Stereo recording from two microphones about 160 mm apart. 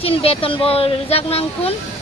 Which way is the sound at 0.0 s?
35° left (ahead or behind).